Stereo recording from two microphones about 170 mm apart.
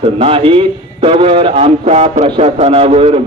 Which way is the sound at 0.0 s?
35° right (ahead or behind).